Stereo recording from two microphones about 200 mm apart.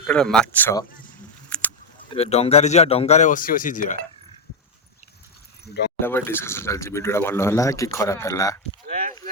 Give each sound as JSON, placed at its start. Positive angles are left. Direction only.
{"t": 0.1, "sound": "speech", "side_deg": 5}
{"t": 1.5, "sound": "a sound", "side_deg": 5}
{"t": 2.0, "sound": "speech", "side_deg": 30}
{"t": 6.0, "sound": "speech", "side_deg": 10}
{"t": 8.9, "sound": "speech", "side_deg": -40}